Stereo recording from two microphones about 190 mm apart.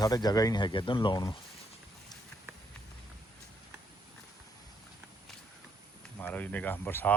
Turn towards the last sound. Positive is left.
turn(degrees=10)  # may be behind; listen again after turning